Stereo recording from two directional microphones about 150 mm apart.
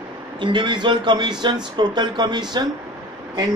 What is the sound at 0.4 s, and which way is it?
A man's voice, 30° right (ahead or behind).